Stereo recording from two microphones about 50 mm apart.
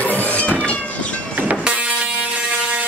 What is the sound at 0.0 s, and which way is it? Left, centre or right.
Cat, left.